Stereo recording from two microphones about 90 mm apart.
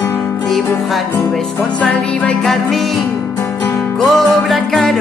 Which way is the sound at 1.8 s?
15° left (ahead or behind).